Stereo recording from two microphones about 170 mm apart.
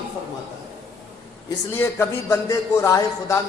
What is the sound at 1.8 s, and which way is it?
A man's voice, 15° left (ahead or behind).